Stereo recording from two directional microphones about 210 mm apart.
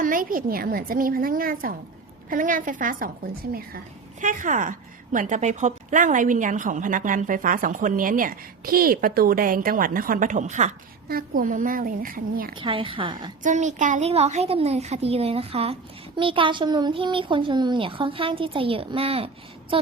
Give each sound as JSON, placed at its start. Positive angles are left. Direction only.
{"t": 0.0, "sound": "a woman's voice", "side_deg": -40}
{"t": 12.5, "sound": "a child's voice", "side_deg": -25}
{"t": 13.4, "sound": "a child's voice", "side_deg": -35}